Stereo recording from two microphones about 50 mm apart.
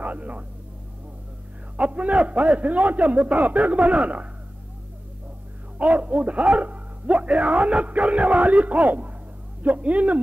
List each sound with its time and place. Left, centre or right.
0.0 s a sound: right
1.8 s a man's voice: right
5.8 s a man's voice: right